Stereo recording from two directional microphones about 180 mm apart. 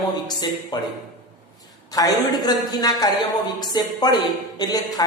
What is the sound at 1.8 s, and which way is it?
A man's voice, 20° left (ahead or behind).